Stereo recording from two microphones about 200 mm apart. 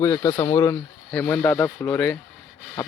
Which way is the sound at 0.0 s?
15° left (ahead or behind).